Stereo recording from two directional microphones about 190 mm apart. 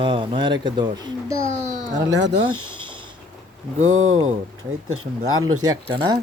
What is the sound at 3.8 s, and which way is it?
Speech, 90° right.